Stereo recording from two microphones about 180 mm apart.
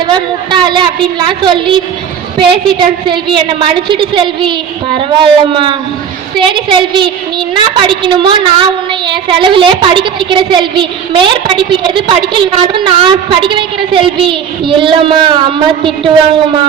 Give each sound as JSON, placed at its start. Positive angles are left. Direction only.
{"t": 0.1, "sound": "a woman's voice", "side_deg": -25}